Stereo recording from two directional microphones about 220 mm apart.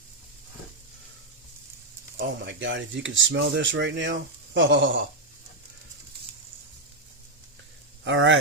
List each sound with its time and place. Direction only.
2.1 s speech: 55° right (ahead or behind)
8.0 s speech: 60° right (ahead or behind)